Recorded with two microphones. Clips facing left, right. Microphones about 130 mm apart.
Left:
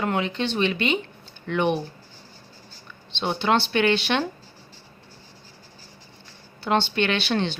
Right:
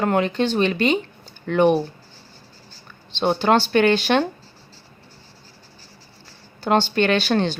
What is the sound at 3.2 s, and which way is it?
Speech, 45° right (ahead or behind).